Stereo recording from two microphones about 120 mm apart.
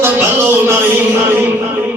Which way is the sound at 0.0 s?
20° right (ahead or behind).